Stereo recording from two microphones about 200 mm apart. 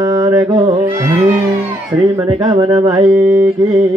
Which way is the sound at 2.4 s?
20° right (ahead or behind).